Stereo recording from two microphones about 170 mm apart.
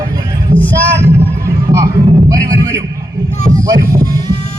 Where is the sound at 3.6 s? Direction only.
55° right (ahead or behind).